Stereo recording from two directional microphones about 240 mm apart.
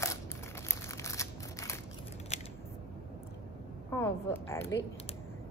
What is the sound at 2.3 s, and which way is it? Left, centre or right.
Scissors, left.